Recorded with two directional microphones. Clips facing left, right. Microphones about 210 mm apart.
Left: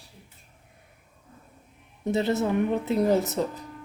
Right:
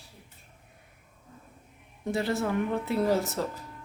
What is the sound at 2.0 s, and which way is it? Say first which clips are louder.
Speech: left 4 dB; 20° left (ahead or behind).